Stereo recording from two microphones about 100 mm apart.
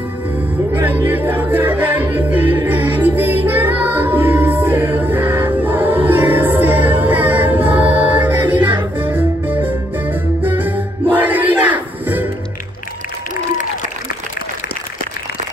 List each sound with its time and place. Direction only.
0.7 s music: 20° right (ahead or behind)